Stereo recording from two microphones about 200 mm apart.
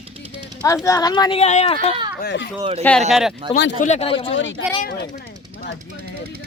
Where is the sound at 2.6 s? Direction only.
30° right (ahead or behind).